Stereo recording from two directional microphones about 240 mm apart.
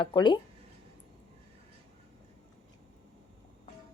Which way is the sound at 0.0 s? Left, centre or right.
Centre.